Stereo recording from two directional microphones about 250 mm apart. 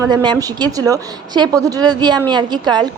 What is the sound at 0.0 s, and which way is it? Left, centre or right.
A woman's voice, centre.